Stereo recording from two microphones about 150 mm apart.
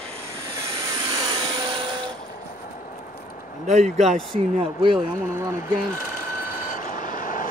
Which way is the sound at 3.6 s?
50° right (ahead or behind).